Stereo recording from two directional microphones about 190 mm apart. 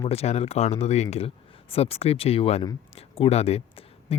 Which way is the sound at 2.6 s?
30° left (ahead or behind).